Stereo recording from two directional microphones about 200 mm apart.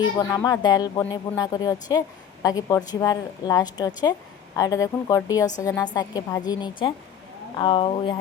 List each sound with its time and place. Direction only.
0.2 s a woman's voice: 15° left (ahead or behind)